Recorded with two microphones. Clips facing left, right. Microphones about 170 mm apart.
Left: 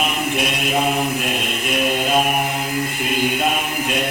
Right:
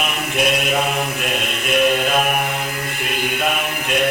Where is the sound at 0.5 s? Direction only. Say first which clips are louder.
Even; 30° left (ahead or behind).